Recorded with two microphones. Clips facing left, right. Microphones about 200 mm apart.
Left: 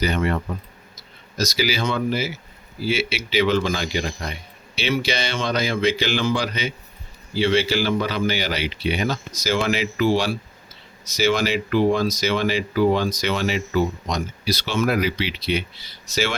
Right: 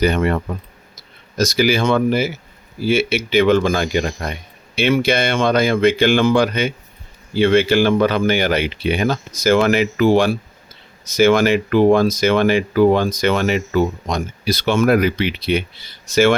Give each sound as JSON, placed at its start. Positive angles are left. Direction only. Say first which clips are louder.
{"t": 0.0, "sound": "speech", "louder": "right 5 dB", "side_deg": -55}